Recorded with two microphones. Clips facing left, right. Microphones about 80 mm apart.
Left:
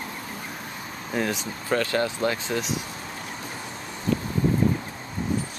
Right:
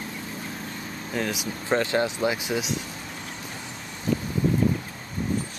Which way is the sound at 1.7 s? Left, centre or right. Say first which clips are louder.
Right 1 dB; right.